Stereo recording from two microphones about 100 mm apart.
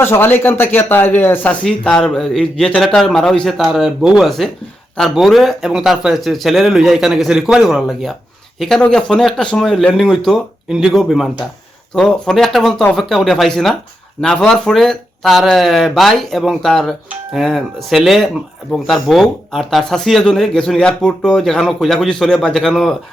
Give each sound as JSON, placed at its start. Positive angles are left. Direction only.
{"t": 0.0, "sound": "speech", "side_deg": 25}
{"t": 1.6, "sound": "speech", "side_deg": 10}
{"t": 10.7, "sound": "speech", "side_deg": -5}